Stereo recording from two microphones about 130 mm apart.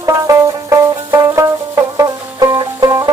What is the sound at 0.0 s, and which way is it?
Music, 25° right (ahead or behind).